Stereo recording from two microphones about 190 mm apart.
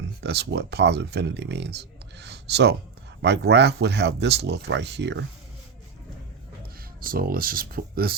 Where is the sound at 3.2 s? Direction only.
65° right (ahead or behind).